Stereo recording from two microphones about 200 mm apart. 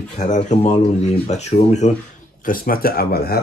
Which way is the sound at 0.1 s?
35° left (ahead or behind).